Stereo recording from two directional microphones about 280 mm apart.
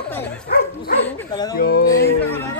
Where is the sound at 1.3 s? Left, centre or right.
Centre.